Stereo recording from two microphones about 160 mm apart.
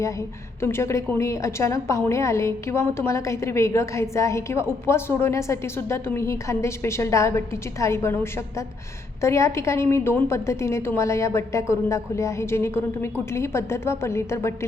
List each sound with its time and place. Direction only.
0.0 s a woman's voice: 20° left (ahead or behind)